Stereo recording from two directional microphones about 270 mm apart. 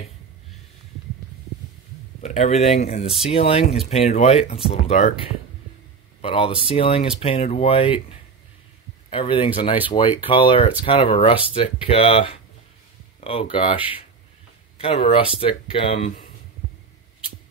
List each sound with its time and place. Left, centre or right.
2.2 s speech: left
6.2 s speech: centre